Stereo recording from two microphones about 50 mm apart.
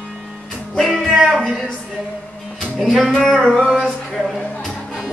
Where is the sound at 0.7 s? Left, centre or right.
Centre.